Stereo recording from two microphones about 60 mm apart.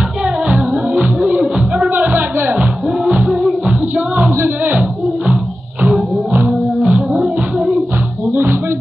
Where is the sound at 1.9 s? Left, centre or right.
Right.